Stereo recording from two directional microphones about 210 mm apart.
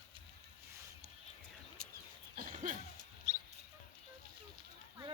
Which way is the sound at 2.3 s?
40° right (ahead or behind).